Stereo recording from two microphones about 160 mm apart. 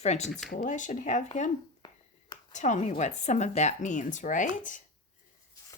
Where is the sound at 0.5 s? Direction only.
55° left (ahead or behind).